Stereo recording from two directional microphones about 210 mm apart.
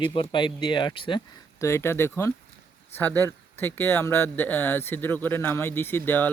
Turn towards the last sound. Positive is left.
turn(degrees=10)  # may be behind; listen again after turning